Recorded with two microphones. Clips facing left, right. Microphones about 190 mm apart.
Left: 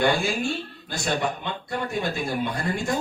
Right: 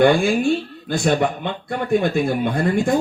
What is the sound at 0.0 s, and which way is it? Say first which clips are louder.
A man's voice: right 8 dB; 55° right (ahead or behind).